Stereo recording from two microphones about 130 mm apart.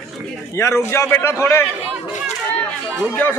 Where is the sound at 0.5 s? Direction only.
20° left (ahead or behind).